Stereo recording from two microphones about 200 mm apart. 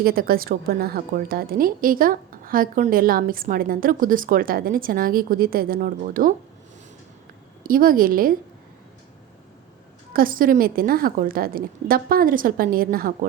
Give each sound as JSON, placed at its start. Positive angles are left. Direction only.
{"t": 0.0, "sound": "a woman's voice", "side_deg": -50}
{"t": 7.6, "sound": "a woman's voice", "side_deg": -45}
{"t": 10.1, "sound": "a woman's voice", "side_deg": -45}